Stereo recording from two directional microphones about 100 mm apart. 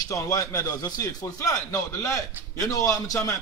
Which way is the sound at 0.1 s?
30° left (ahead or behind).